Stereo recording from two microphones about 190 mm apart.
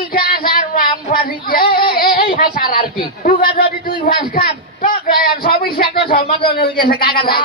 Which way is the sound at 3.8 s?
45° left (ahead or behind).